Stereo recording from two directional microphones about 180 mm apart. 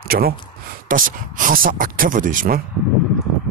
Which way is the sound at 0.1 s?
60° right (ahead or behind).